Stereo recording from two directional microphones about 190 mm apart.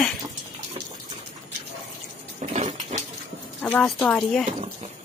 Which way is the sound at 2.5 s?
35° right (ahead or behind).